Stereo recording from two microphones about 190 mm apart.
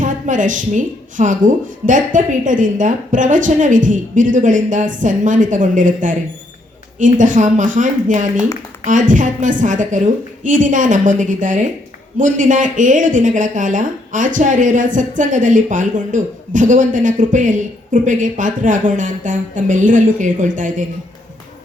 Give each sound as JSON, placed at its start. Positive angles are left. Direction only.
{"t": 0.0, "sound": "a woman's voice", "side_deg": -40}